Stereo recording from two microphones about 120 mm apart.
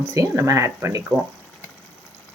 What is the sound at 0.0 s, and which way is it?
Speech, 25° right (ahead or behind).